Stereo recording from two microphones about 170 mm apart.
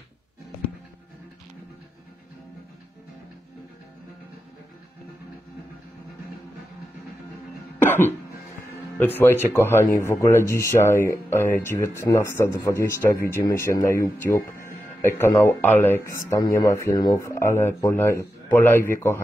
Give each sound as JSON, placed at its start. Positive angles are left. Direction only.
{"t": 7.8, "sound": "cough", "side_deg": 10}
{"t": 8.9, "sound": "speech", "side_deg": 10}